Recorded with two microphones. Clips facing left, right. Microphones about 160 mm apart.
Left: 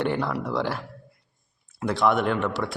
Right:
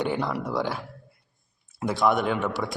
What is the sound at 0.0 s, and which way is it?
Speech, centre (ahead or behind).